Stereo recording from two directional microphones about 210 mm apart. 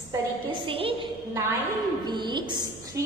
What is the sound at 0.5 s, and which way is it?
Speech, 25° right (ahead or behind).